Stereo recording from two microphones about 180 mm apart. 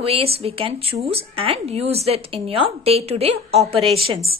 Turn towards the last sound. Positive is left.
turn(degrees=-30)  # may be behind; listen again after turning